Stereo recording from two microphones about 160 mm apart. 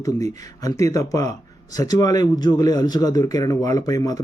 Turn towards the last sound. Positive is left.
turn(degrees=25)  # may be behind; listen again after turning